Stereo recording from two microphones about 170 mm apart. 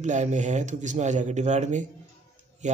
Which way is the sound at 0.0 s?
45° right (ahead or behind).